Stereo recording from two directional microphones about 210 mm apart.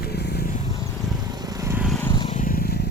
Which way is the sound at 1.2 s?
20° right (ahead or behind).